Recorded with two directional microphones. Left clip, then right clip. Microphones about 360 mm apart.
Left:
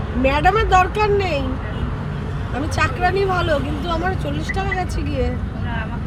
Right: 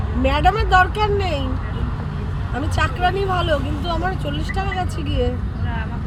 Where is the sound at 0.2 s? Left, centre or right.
Left.